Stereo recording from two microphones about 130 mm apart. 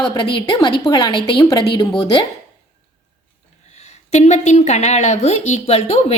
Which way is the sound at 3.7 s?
60° left (ahead or behind).